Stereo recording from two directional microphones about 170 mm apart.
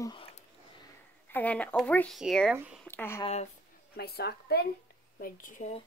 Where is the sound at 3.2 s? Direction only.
40° left (ahead or behind).